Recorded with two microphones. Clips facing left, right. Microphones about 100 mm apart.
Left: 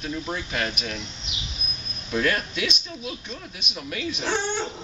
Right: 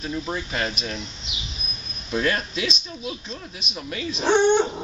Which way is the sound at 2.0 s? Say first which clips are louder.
Right 1 dB; centre (ahead or behind).